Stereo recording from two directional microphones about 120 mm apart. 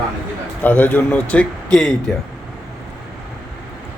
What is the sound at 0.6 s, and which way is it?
Speech, 15° left (ahead or behind).